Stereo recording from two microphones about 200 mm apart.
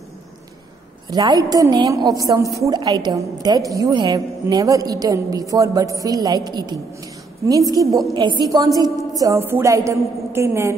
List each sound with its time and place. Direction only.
1.1 s a woman's voice: 20° right (ahead or behind)